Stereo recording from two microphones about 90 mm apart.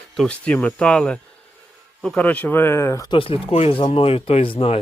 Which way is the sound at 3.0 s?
85° left.